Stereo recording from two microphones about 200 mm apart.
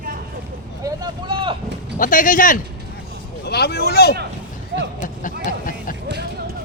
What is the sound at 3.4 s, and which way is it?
Speech, 55° left (ahead or behind).